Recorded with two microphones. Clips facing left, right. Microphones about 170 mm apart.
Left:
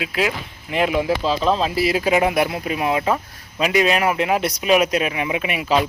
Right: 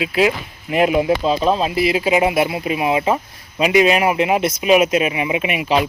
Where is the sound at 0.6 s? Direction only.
20° right (ahead or behind).